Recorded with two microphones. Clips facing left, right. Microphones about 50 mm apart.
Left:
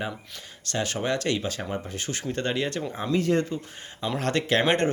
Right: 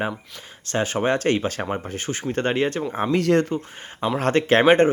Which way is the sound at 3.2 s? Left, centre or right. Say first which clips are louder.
Right 5 dB; right.